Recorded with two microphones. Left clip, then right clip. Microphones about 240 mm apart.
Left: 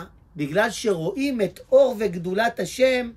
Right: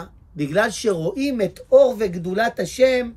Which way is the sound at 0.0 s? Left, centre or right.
Centre.